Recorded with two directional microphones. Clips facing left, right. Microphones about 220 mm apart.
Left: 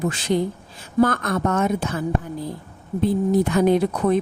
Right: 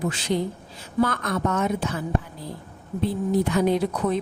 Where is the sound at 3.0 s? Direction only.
45° left (ahead or behind).